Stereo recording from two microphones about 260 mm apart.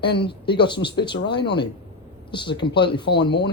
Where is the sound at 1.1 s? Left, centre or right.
Left.